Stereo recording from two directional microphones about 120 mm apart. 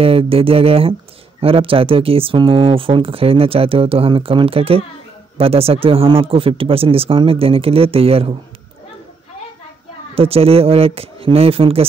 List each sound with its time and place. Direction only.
0.0 s speech: 50° right (ahead or behind)
10.1 s speech: 55° right (ahead or behind)